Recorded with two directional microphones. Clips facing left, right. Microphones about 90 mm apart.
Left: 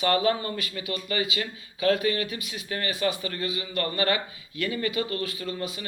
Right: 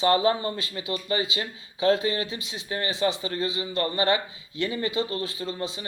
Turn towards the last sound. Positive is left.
turn(degrees=-25)  # may be behind; listen again after turning